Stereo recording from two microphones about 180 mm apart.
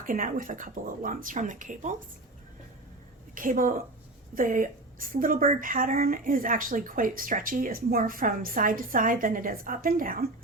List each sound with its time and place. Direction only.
0.0 s a woman's voice: 50° right (ahead or behind)
3.3 s a woman's voice: 50° right (ahead or behind)